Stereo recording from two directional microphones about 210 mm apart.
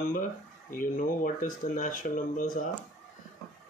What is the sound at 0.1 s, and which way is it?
Speech, 40° left (ahead or behind).